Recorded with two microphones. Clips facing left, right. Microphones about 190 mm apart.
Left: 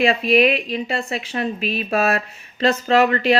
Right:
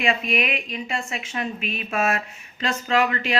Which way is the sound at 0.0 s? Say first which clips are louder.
Left 8 dB; 35° left (ahead or behind).